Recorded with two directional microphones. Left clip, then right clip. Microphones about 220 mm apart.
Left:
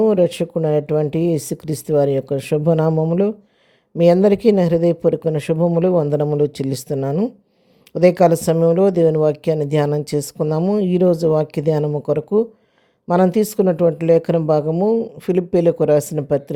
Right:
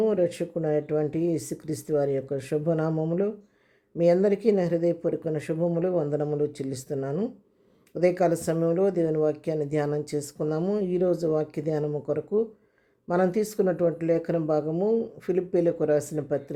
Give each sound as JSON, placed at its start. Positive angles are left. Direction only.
{"t": 0.0, "sound": "speech", "side_deg": 30}